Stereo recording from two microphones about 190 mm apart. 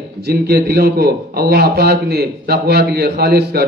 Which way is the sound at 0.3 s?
55° right (ahead or behind).